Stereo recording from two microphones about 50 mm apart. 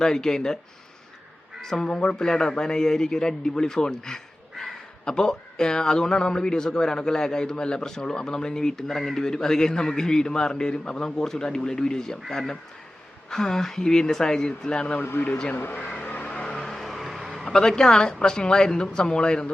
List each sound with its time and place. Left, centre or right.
0.0 s a man's voice: centre
1.6 s a man's voice: centre
15.2 s speech: left
16.2 s vehicle: left
16.6 s vehicle: centre
17.5 s a man's voice: centre